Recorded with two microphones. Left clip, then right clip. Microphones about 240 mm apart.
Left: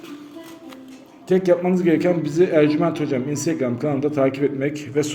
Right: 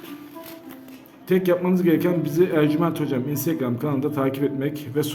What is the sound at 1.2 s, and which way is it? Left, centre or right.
A man's voice, centre.